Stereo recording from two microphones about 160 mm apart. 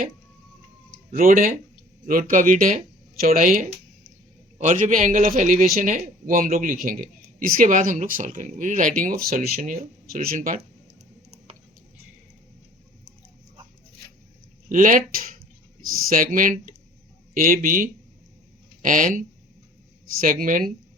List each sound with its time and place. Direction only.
1.1 s speech: 60° right (ahead or behind)
14.7 s speech: 55° right (ahead or behind)